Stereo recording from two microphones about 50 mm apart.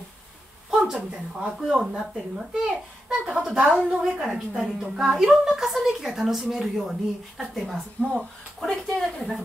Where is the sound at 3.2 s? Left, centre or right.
Centre.